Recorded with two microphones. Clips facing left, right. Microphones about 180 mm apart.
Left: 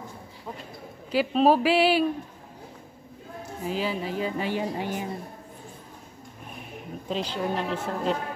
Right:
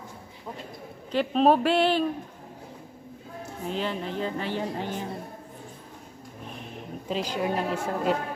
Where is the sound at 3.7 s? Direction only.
5° left (ahead or behind).